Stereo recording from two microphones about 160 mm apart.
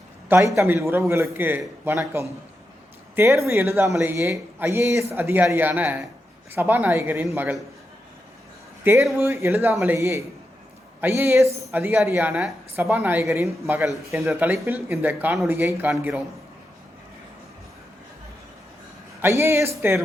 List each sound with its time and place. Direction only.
0.3 s a man's voice: 15° right (ahead or behind)
8.8 s a man's voice: 15° right (ahead or behind)
19.2 s a man's voice: 15° right (ahead or behind)